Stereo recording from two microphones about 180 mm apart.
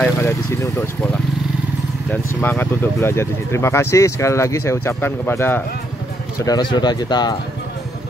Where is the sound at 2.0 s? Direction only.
10° left (ahead or behind).